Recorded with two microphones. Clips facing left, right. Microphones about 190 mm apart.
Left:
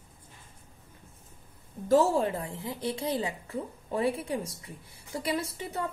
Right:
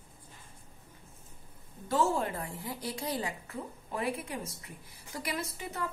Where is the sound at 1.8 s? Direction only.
40° left (ahead or behind).